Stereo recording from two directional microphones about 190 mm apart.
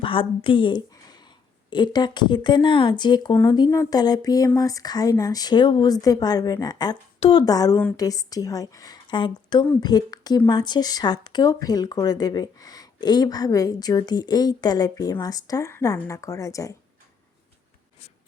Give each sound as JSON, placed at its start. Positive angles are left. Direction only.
{"t": 0.0, "sound": "a woman's voice", "side_deg": 30}